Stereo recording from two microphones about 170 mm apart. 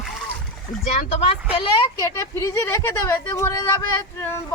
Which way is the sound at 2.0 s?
20° left (ahead or behind).